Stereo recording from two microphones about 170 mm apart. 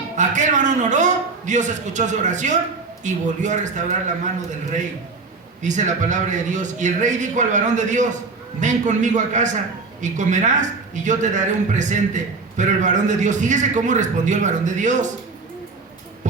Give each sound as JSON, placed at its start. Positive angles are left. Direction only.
{"t": 0.2, "sound": "a sound", "side_deg": -45}
{"t": 3.0, "sound": "a man's voice", "side_deg": -45}
{"t": 5.6, "sound": "a man's voice", "side_deg": -45}
{"t": 16.2, "sound": "speech", "side_deg": -45}